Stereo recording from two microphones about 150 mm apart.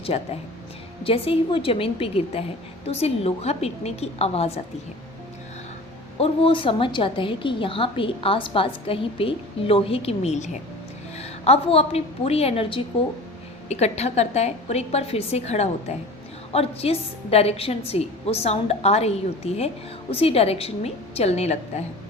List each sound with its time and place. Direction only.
0.1 s a woman's voice: 40° left (ahead or behind)
6.1 s a woman's voice: 40° left (ahead or behind)